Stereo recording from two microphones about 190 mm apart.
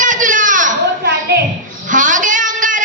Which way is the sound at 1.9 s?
40° right (ahead or behind).